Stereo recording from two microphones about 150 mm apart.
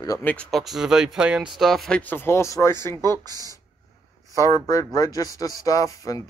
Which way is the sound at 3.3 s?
25° right (ahead or behind).